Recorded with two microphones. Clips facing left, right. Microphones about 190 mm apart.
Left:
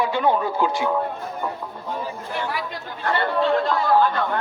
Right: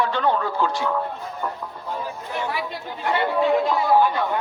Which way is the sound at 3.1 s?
10° right (ahead or behind).